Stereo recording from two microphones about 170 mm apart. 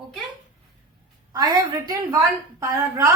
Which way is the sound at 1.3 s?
20° right (ahead or behind).